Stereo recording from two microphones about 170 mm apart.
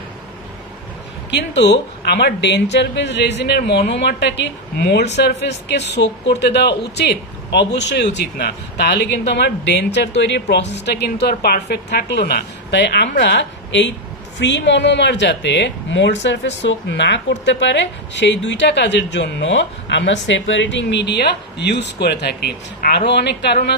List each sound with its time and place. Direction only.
1.3 s speech: 90° left